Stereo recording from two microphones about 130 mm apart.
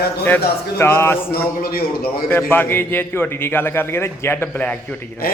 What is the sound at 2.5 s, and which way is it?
A man's voice, 15° left (ahead or behind).